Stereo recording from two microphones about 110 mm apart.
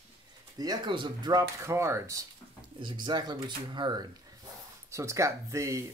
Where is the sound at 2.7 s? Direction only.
45° right (ahead or behind).